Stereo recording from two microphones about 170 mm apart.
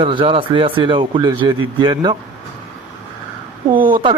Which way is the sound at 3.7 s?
55° right (ahead or behind).